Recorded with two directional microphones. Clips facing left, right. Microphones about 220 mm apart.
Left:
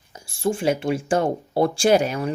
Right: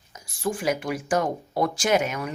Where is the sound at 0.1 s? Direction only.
30° left (ahead or behind).